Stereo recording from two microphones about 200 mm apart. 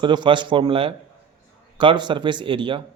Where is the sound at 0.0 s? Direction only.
25° right (ahead or behind).